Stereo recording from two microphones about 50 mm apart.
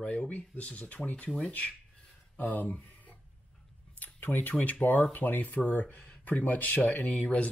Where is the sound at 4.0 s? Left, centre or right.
Left.